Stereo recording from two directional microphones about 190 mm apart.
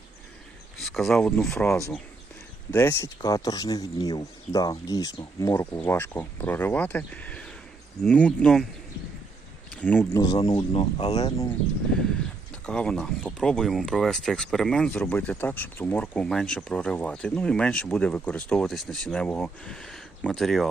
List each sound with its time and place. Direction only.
0.8 s speech: centre (ahead or behind)
9.8 s speech: 10° left (ahead or behind); by 11.3 s 35° left (ahead or behind)
12.6 s speech: 5° left (ahead or behind)